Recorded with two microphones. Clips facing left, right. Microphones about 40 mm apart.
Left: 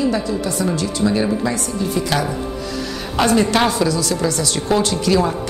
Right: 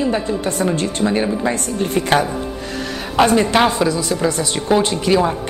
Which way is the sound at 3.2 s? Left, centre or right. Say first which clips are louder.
Right 2 dB; right.